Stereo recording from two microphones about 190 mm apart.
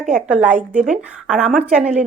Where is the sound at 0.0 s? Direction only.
5° right (ahead or behind).